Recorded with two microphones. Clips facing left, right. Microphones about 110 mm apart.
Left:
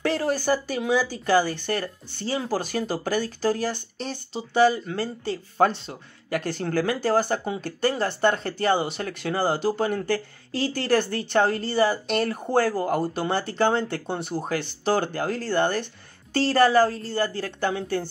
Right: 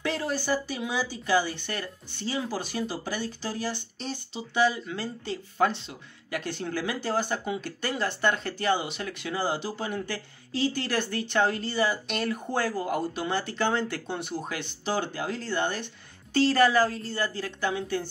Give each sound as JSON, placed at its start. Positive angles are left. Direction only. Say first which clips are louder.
{"t": 0.0, "sound": "speech", "louder": "left 5 dB", "side_deg": 45}